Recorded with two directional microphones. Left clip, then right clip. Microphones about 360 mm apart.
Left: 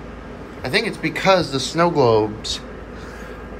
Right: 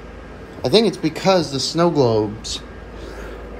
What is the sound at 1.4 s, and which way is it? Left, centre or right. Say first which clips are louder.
Speech: even; right.